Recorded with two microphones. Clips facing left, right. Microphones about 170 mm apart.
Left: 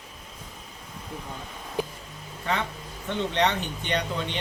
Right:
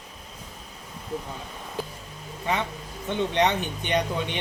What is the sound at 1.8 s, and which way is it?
Music, 15° left (ahead or behind).